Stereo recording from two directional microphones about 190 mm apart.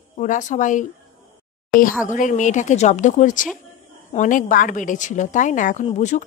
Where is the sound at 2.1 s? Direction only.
45° left (ahead or behind).